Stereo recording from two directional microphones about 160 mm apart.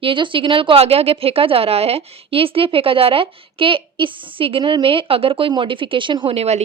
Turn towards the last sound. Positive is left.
turn(degrees=-40)  # may be behind; listen again after turning